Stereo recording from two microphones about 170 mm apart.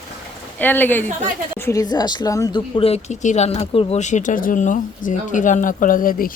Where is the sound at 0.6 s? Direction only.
10° left (ahead or behind).